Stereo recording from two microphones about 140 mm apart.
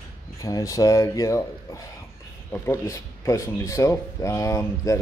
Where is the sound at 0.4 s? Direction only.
25° left (ahead or behind).